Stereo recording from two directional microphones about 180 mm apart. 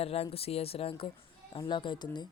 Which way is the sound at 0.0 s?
35° left (ahead or behind).